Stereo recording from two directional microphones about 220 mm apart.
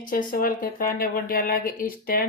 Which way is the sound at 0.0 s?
40° left (ahead or behind).